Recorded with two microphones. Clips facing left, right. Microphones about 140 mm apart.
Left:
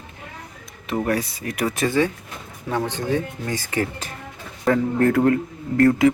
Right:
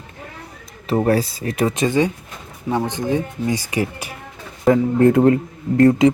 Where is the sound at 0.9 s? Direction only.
35° right (ahead or behind).